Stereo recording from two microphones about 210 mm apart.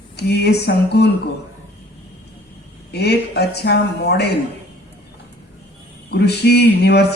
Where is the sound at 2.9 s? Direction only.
50° left (ahead or behind).